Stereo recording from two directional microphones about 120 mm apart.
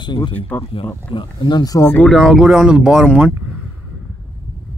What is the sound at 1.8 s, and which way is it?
Speech, 15° left (ahead or behind).